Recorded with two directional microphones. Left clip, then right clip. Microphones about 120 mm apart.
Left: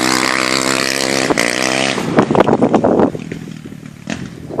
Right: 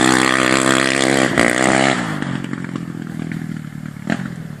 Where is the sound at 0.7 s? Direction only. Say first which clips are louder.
Right 1 dB; 40° left (ahead or behind).